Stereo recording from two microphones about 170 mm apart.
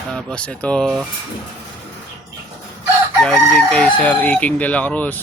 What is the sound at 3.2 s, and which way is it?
A man's voice, 5° left (ahead or behind).